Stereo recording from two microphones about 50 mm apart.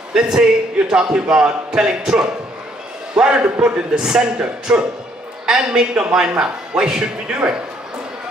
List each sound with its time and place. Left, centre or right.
0.1 s a man's voice: centre